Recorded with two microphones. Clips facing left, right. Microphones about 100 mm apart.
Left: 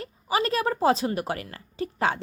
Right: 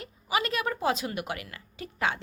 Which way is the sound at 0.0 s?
35° left (ahead or behind).